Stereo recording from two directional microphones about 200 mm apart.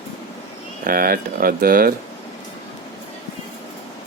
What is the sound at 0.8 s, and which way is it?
Speech, 45° right (ahead or behind).